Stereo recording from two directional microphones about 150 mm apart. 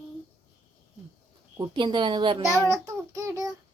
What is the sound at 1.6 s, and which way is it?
Speech, 30° right (ahead or behind).